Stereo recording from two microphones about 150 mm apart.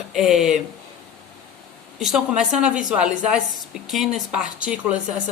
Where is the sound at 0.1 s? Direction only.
Centre (ahead or behind).